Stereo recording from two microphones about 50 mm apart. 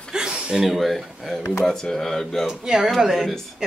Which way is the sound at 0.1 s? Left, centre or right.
Centre.